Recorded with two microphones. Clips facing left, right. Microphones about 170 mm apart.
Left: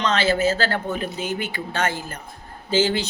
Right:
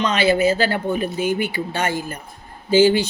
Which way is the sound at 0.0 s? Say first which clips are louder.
Right 3 dB; 15° right (ahead or behind).